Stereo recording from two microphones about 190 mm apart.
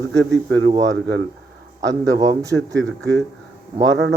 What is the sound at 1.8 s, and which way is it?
Speech, 20° right (ahead or behind).